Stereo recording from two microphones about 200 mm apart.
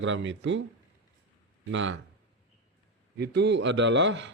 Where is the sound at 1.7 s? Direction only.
65° right (ahead or behind).